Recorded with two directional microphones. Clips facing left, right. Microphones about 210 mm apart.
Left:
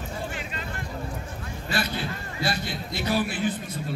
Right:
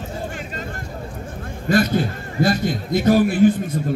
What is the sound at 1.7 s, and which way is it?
A man's voice, 45° right (ahead or behind).